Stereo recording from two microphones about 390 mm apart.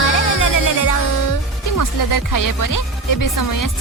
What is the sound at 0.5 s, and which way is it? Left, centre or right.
Speech, left.